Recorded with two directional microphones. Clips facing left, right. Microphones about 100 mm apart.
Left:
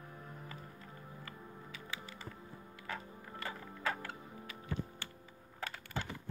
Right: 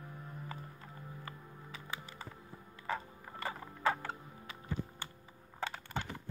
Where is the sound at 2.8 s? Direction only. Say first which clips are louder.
Right 6 dB; 30° right (ahead or behind).